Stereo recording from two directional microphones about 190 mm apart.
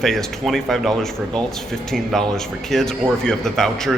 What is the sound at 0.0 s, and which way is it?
A man's voice, centre (ahead or behind).